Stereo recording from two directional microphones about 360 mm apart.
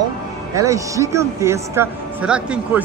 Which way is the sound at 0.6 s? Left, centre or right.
Centre.